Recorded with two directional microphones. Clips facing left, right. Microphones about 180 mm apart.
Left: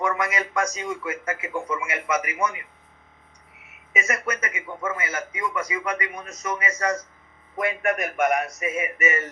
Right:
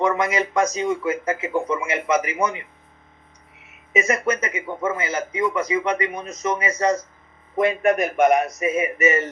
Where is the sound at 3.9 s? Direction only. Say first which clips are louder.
Right 7 dB; 20° right (ahead or behind).